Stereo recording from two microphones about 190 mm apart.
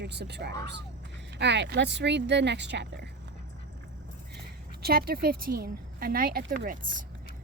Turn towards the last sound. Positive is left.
turn(degrees=-45)  # may be behind; listen again after turning